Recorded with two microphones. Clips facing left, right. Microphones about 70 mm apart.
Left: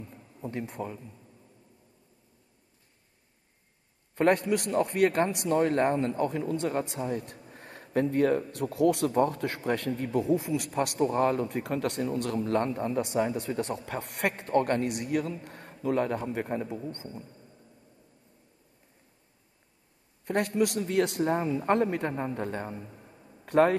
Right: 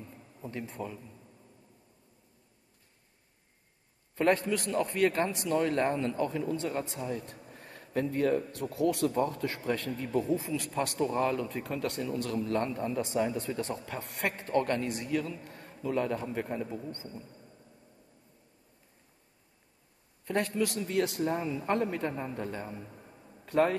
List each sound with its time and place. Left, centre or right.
0.4 s a man's voice: left
4.1 s a sound: left
4.5 s a man's voice: left
7.4 s a sound: left
8.5 s a man's voice: left
10.0 s a man's voice: left
10.3 s a man's voice: left
11.0 s a man's voice: left
11.4 s a man's voice: left
14.9 s a man's voice: left
17.3 s a sound: centre
20.2 s a man's voice: left
23.0 s a sound: centre
23.4 s speech: left